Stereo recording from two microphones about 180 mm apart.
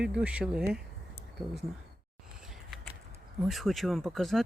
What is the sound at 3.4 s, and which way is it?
Speech, centre (ahead or behind).